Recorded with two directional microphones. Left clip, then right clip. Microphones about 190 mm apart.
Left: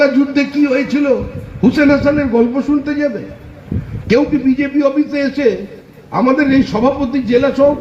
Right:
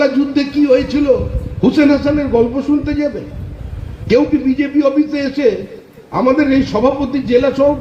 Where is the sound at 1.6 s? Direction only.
55° left (ahead or behind).